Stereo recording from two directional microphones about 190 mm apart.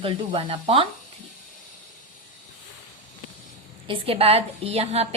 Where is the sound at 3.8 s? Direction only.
30° right (ahead or behind).